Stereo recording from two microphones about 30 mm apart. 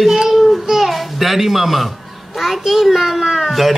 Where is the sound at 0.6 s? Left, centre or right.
Centre.